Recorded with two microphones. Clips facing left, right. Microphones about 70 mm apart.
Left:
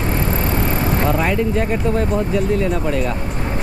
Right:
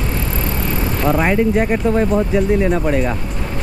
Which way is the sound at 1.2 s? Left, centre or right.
Right.